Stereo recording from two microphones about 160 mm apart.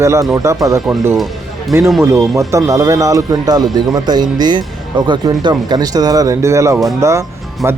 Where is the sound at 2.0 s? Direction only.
20° right (ahead or behind).